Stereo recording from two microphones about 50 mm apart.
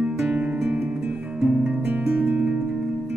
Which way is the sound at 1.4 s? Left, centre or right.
Right.